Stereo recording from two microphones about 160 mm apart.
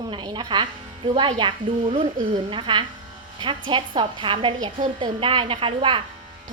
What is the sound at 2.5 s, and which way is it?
A woman's voice, 30° right (ahead or behind).